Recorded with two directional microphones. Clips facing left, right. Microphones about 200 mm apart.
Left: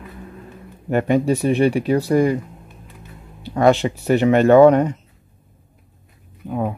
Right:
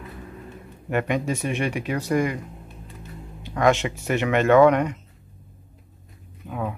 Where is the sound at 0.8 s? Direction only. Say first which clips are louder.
Left 7 dB; 35° left (ahead or behind).